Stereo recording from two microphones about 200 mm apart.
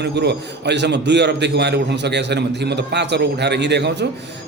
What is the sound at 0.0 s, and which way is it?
A man's voice, 55° right (ahead or behind).